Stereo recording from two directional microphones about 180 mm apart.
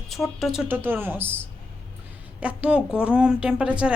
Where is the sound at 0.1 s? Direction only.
Centre (ahead or behind).